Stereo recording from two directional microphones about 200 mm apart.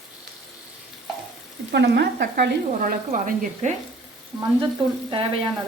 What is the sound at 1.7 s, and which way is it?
Speech, 55° right (ahead or behind).